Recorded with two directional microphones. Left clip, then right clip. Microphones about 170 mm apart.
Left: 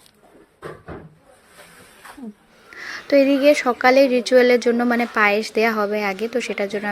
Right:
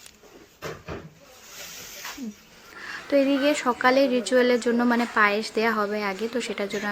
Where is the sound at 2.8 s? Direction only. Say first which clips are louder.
Left 6 dB; 25° left (ahead or behind).